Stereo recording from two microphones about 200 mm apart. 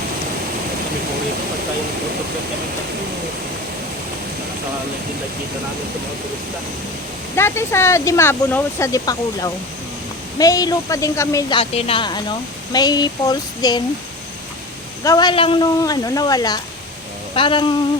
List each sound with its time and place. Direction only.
7.3 s speech: 10° left (ahead or behind)
15.0 s speech: 20° left (ahead or behind)